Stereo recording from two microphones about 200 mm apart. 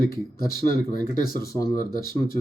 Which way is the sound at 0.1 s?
45° left (ahead or behind).